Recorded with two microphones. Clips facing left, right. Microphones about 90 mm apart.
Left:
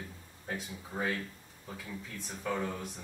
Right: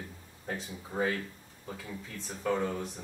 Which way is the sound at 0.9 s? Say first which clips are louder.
Right 3 dB; 30° right (ahead or behind).